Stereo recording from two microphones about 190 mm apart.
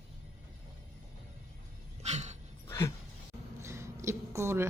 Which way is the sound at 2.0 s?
35° right (ahead or behind).